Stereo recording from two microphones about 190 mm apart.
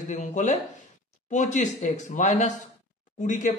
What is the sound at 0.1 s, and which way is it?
Speech, 40° left (ahead or behind).